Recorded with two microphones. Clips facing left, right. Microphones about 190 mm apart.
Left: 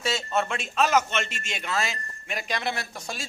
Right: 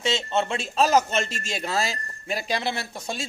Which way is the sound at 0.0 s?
25° right (ahead or behind).